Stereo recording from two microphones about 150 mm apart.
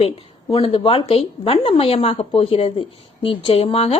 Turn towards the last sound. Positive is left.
turn(degrees=40)  # may be behind; listen again after turning